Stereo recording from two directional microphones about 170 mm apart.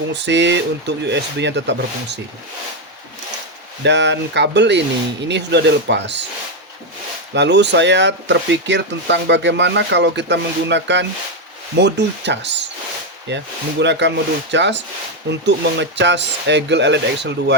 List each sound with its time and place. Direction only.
0.1 s speech: 90° right
3.8 s speech: 90° right
7.3 s speech: 90° right